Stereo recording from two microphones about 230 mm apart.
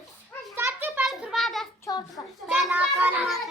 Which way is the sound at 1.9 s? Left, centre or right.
Centre.